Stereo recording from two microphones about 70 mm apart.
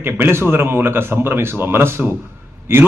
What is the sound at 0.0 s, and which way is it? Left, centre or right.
A man's voice, right.